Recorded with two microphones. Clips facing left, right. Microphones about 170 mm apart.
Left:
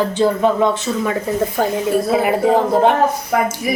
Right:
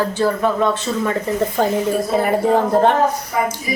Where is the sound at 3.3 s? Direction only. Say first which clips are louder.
Left 5 dB; 65° left (ahead or behind).